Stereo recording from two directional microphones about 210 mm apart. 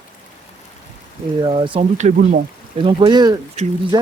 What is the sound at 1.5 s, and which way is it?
Speech, 25° right (ahead or behind).